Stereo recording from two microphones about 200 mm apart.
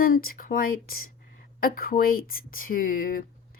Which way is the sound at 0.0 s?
45° left (ahead or behind).